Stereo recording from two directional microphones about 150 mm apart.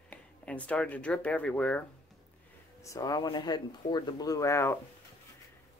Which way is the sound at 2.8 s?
25° left (ahead or behind).